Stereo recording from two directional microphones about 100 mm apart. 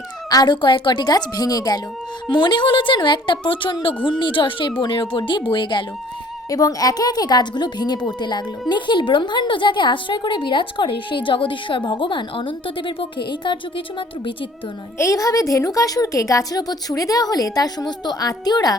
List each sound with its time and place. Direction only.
0.3 s a woman's voice: 45° left (ahead or behind)
6.5 s a woman's voice: 35° left (ahead or behind); by 13.8 s 55° left (ahead or behind)
14.9 s a woman's voice: 30° left (ahead or behind)